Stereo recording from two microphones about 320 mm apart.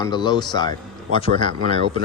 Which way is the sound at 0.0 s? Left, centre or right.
Centre.